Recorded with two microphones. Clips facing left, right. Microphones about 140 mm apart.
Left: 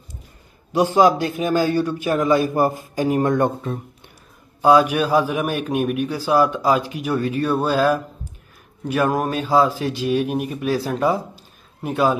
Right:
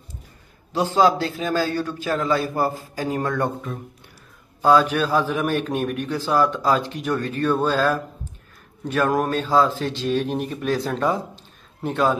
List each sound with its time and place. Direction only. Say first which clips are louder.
0.7 s a man's voice: left 3 dB; 10° left (ahead or behind)
4.6 s a man's voice: left 2 dB; 15° left (ahead or behind)